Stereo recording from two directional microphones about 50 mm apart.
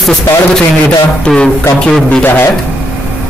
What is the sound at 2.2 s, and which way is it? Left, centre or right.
Speech, left.